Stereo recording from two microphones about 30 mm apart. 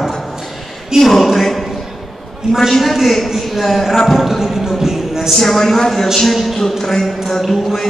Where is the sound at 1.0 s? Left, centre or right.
Centre.